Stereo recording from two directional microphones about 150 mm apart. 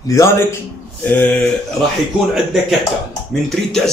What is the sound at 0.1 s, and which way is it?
A man's voice, 20° left (ahead or behind).